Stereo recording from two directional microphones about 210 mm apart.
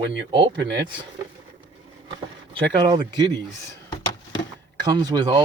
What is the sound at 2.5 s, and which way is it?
Speech, 20° right (ahead or behind).